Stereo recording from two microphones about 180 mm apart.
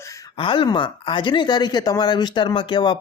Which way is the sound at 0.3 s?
30° left (ahead or behind).